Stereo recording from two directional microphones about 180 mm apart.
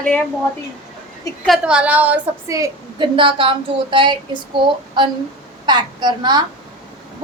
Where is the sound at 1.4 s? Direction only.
5° right (ahead or behind).